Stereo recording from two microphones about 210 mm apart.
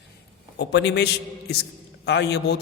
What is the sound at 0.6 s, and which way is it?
A man's voice, 55° left (ahead or behind).